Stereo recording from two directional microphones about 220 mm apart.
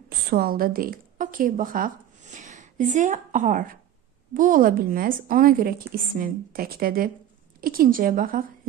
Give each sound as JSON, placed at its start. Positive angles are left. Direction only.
{"t": 0.3, "sound": "a woman's voice", "side_deg": -45}